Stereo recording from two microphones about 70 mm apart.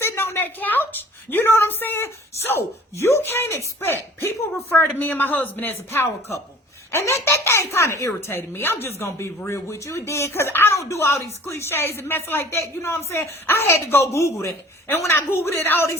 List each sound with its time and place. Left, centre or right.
0.0 s a woman's voice: left
4.9 s a woman's voice: left